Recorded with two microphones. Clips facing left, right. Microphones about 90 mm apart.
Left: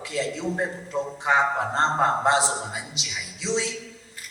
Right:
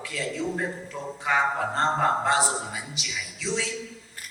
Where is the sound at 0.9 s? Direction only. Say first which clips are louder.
Left 7 dB; 25° left (ahead or behind).